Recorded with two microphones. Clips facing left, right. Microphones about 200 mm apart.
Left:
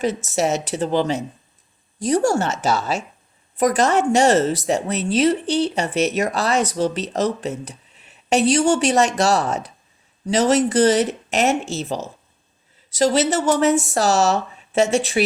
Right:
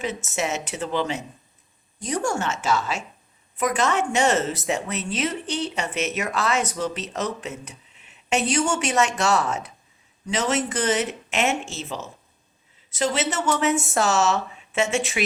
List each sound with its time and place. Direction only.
0.0 s a woman's voice: 35° left (ahead or behind)